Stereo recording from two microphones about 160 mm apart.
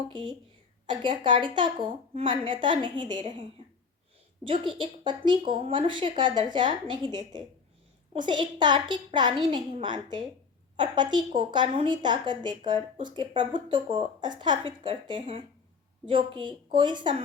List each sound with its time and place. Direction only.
0.1 s a woman's voice: 30° right (ahead or behind)
4.4 s speech: 30° right (ahead or behind)